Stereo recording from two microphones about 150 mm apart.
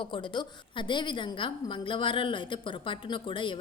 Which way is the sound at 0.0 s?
35° left (ahead or behind).